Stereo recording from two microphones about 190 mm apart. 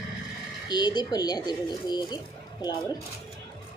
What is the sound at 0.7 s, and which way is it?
Speech, 20° left (ahead or behind).